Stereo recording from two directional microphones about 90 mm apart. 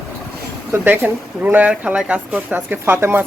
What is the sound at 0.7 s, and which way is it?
Speech, 20° right (ahead or behind).